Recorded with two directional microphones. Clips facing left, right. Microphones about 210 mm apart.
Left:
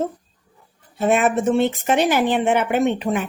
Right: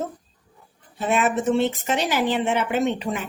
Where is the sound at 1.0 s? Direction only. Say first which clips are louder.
Left 4 dB; 50° left (ahead or behind).